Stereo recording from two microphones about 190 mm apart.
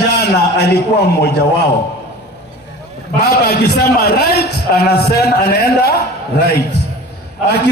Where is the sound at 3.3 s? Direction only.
60° left (ahead or behind).